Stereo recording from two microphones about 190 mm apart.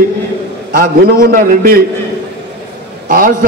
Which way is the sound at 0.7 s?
45° right (ahead or behind).